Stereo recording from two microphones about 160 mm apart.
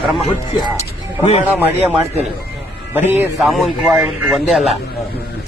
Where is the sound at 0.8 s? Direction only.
45° left (ahead or behind).